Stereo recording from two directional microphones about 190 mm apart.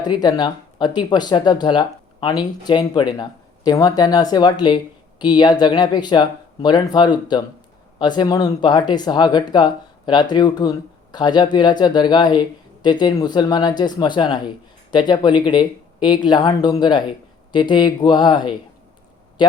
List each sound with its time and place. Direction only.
0.0 s speech: 20° left (ahead or behind)